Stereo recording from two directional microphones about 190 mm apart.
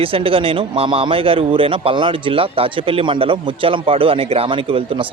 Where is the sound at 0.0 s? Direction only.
30° right (ahead or behind).